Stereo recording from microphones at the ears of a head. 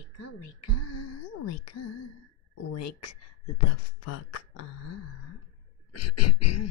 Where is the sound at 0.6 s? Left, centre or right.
Left.